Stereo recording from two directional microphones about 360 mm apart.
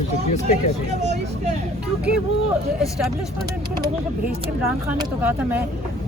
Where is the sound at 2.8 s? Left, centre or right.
Centre.